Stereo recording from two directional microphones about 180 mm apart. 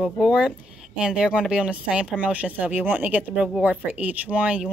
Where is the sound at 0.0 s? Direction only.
5° right (ahead or behind).